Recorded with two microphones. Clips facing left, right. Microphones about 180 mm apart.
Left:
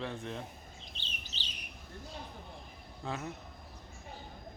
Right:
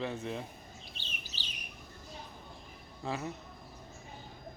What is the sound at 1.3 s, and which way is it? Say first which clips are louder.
Bird: even; 50° right (ahead or behind).